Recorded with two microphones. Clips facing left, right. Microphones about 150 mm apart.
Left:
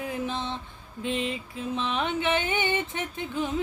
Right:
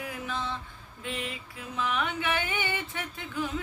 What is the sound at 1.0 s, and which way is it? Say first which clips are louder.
Female singing: left 7 dB; 20° left (ahead or behind).